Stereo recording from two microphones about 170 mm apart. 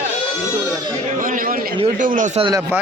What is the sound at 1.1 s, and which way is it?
Chatter, 55° right (ahead or behind).